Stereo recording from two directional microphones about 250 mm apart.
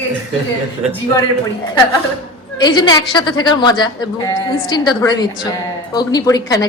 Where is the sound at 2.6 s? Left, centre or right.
Centre.